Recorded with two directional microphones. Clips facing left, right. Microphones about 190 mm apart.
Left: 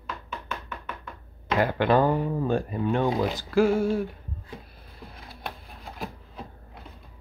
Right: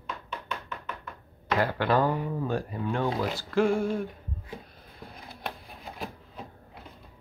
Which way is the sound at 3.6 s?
5° left (ahead or behind).